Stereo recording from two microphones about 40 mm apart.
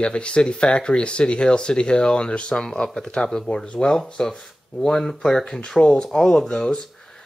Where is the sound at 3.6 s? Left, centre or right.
Left.